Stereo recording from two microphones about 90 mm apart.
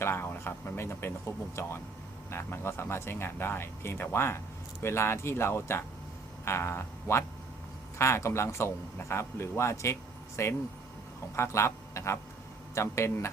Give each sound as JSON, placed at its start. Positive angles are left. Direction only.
{"t": 0.0, "sound": "a man's voice", "side_deg": 25}